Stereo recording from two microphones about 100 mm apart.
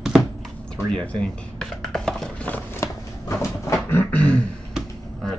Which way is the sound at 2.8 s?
30° left (ahead or behind).